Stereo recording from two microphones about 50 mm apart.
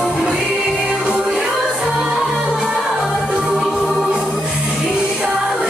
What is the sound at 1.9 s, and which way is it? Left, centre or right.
Music, centre.